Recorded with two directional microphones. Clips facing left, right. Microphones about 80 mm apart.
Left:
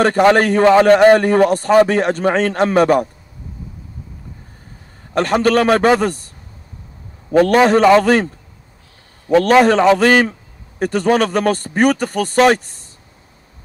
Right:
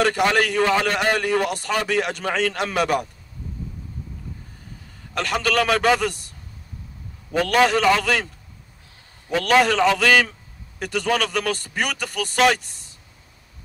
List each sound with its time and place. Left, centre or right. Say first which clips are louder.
0.0 s a man's voice: left 7 dB; left
5.1 s a man's voice: left 8 dB; left
7.3 s a man's voice: left 7 dB; left